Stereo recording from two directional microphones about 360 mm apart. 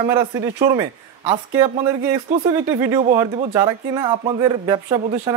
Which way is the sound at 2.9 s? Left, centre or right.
Centre.